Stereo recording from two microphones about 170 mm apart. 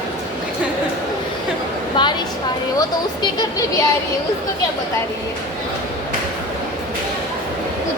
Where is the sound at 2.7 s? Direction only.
20° left (ahead or behind).